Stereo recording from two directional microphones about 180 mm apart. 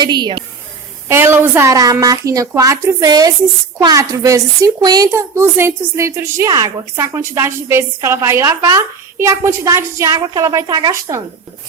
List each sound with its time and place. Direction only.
0.0 s speech: 25° right (ahead or behind)
1.0 s a child's voice: 15° right (ahead or behind)